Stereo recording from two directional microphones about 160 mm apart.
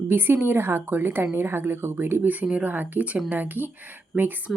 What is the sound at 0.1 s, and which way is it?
A woman's voice, 15° right (ahead or behind).